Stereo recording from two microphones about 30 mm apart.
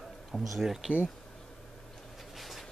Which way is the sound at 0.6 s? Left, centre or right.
Centre.